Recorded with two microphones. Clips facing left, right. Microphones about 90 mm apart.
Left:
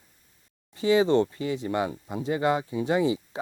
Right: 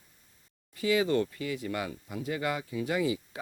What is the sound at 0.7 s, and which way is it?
Speech, 30° left (ahead or behind).